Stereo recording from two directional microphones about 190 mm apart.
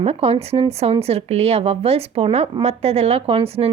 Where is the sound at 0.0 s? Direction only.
30° right (ahead or behind).